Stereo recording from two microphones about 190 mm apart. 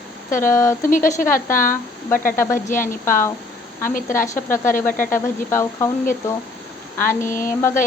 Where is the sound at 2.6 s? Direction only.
45° left (ahead or behind).